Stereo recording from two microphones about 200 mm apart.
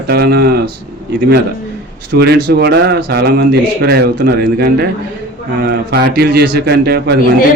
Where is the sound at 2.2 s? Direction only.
55° right (ahead or behind).